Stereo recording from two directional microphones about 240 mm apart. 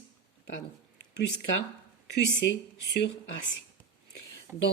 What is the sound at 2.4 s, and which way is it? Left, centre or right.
Speech, left.